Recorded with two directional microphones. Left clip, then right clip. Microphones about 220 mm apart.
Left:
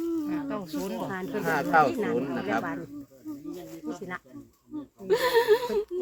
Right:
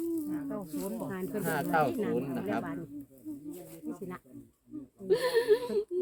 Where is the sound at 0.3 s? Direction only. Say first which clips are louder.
Left 5 dB; 40° left (ahead or behind).